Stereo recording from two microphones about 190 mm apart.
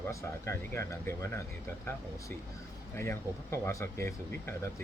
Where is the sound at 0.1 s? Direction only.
15° left (ahead or behind).